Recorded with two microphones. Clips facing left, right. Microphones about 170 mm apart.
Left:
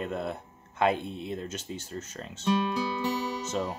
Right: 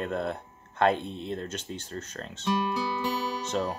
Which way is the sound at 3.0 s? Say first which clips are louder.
Even; 20° left (ahead or behind).